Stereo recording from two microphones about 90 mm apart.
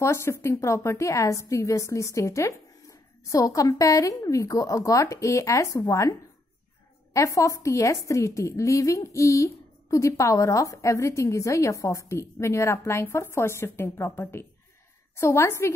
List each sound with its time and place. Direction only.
0.0 s a woman's voice: 30° left (ahead or behind)
7.2 s a woman's voice: 35° left (ahead or behind)